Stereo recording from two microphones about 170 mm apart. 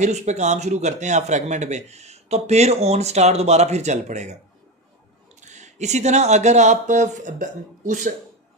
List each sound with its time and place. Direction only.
0.0 s speech: 40° right (ahead or behind)
5.4 s speech: 45° right (ahead or behind)